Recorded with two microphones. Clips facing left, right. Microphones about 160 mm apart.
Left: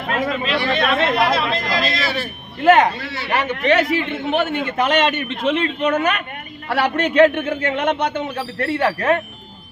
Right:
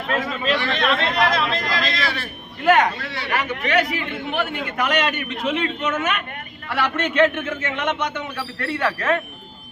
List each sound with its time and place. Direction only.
0.5 s chatter: 10° left (ahead or behind)
2.6 s a man's voice: 25° left (ahead or behind)